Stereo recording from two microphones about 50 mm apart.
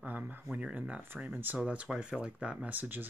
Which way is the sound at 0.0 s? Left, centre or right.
Right.